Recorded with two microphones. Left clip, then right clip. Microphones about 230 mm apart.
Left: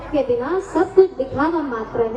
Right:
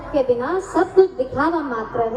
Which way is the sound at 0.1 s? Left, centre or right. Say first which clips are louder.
Right 1 dB; right.